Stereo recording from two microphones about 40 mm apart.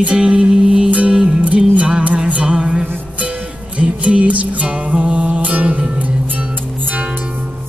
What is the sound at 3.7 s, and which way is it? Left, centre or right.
Music, right.